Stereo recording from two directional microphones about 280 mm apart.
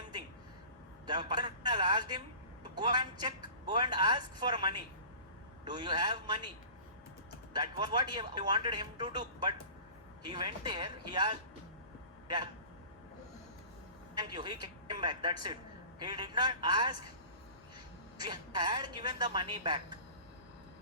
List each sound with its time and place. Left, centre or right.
1.0 s a man's voice: centre
7.5 s a man's voice: centre
14.2 s a man's voice: centre
18.2 s a man's voice: centre